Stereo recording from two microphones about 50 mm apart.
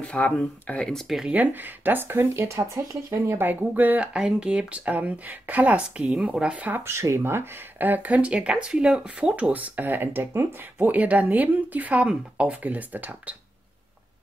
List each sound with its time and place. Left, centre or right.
0.0 s speech: left
0.9 s speech: centre
1.3 s speech: right
2.3 s speech: right
3.3 s speech: right
4.1 s speech: centre
6.8 s speech: right
7.8 s speech: right
10.8 s speech: right
12.6 s speech: right